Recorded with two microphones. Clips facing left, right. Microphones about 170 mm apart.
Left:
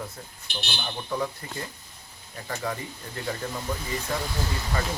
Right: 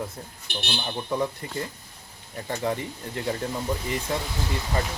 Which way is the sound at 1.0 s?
20° right (ahead or behind).